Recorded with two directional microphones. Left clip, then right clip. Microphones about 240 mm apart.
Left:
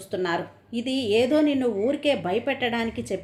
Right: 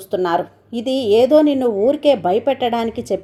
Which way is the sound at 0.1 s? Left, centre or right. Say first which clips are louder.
Right 9 dB; right.